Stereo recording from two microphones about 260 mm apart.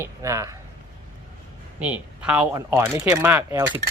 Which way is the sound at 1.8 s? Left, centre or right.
Centre.